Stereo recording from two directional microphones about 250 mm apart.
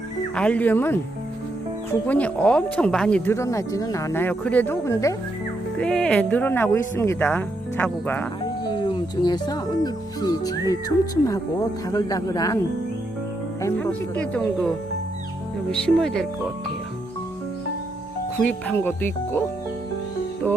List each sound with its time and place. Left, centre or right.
0.3 s speech: centre
13.6 s speech: centre
18.4 s speech: centre
20.4 s music: centre